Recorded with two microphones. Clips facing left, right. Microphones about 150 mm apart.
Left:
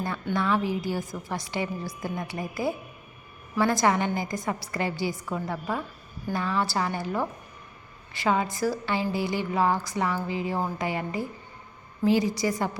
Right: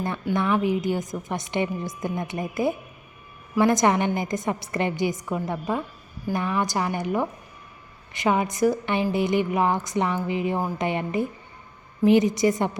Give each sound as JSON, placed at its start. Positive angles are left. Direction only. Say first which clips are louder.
{"t": 0.3, "sound": "a woman's voice", "louder": "right 3 dB", "side_deg": -20}